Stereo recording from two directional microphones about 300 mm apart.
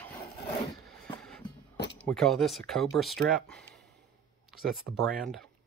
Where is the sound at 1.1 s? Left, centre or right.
Centre.